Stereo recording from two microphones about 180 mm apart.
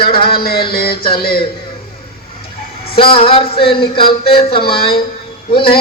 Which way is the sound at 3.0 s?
30° left (ahead or behind).